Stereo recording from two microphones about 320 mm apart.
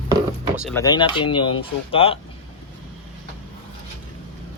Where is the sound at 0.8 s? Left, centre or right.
Centre.